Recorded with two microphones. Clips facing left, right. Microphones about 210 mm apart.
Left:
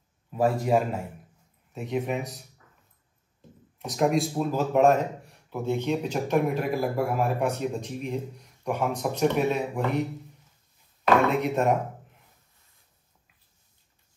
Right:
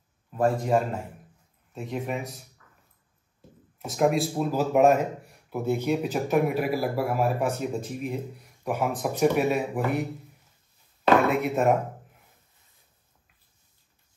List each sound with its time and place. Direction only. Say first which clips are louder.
0.3 s speech: even; 5° left (ahead or behind)
3.8 s speech: right 1 dB; centre (ahead or behind)
11.2 s speech: right 1 dB; 5° right (ahead or behind)